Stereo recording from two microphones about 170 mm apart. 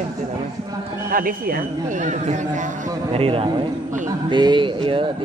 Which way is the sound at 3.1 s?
35° right (ahead or behind).